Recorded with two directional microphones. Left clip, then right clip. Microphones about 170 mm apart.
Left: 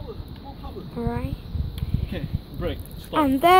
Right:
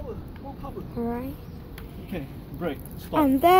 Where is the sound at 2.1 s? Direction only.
30° right (ahead or behind).